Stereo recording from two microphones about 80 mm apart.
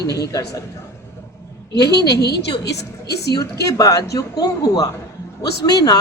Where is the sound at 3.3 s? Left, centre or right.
Left.